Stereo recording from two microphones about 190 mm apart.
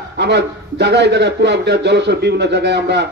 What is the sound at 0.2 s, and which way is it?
A man's voice, 65° right (ahead or behind).